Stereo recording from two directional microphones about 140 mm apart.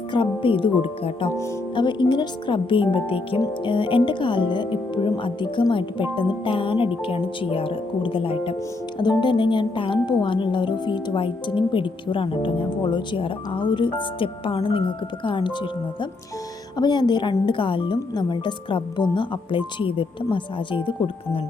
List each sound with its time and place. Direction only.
0.1 s speech: 40° left (ahead or behind)
16.7 s speech: 30° left (ahead or behind)